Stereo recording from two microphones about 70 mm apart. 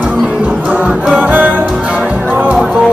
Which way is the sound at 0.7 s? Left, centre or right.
Centre.